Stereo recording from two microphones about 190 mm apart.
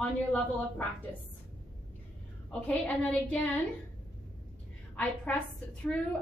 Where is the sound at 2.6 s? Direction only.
5° left (ahead or behind).